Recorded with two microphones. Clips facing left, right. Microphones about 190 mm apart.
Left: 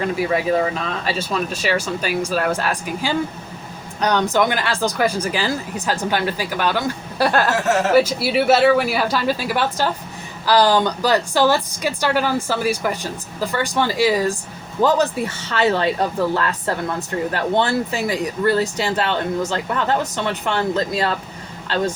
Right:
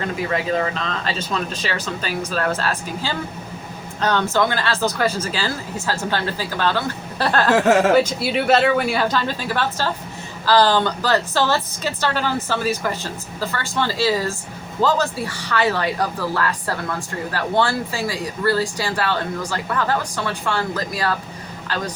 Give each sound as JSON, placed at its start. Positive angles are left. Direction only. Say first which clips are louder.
{"t": 0.0, "sound": "a woman's voice", "louder": "left 3 dB", "side_deg": 10}